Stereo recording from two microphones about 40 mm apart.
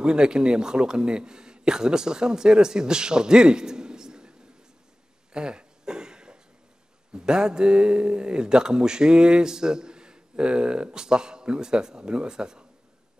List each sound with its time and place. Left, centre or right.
0.0 s speech: right
5.3 s a sound: right
7.1 s speech: centre